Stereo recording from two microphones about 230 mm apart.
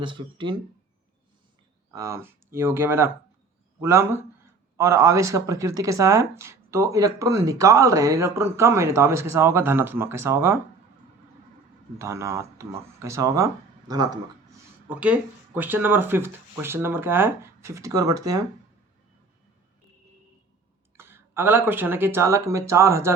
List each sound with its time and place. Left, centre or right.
0.0 s speech: right
1.9 s speech: centre
11.9 s speech: centre
20.9 s speech: centre